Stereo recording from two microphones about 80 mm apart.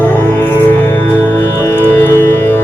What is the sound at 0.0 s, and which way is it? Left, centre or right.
Music, left.